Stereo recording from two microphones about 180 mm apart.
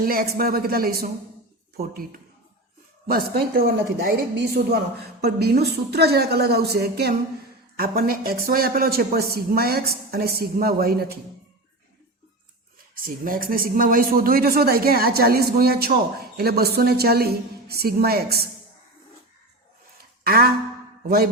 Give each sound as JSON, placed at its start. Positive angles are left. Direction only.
{"t": 0.0, "sound": "speech", "side_deg": -55}
{"t": 13.1, "sound": "speech", "side_deg": -50}
{"t": 20.2, "sound": "a sound", "side_deg": -55}